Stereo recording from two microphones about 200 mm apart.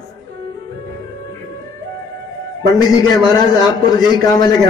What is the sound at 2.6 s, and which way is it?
A man's voice, 20° left (ahead or behind).